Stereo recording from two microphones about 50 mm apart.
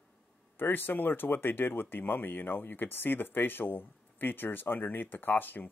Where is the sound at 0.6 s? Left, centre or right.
Left.